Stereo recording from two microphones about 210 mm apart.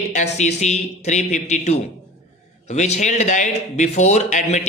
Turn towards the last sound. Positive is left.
turn(degrees=35)  # may be behind; listen again after turning